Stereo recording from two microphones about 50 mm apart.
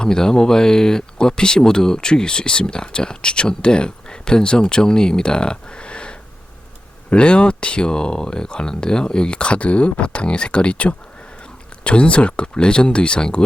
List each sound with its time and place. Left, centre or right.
0.0 s speech: centre